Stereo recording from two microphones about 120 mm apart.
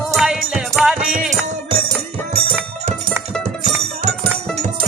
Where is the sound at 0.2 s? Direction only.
5° right (ahead or behind).